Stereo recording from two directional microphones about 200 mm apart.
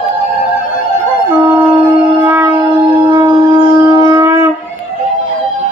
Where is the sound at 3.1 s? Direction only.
20° right (ahead or behind).